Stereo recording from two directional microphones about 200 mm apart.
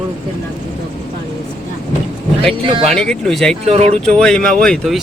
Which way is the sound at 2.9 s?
5° left (ahead or behind).